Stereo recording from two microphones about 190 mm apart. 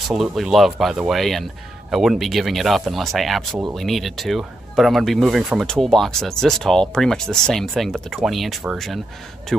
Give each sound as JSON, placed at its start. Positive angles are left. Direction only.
{"t": 0.1, "sound": "speech", "side_deg": 0}